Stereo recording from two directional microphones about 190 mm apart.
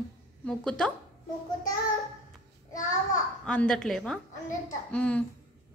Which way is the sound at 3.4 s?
5° left (ahead or behind).